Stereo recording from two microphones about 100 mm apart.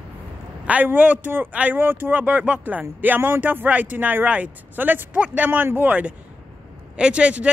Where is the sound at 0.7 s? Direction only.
15° right (ahead or behind).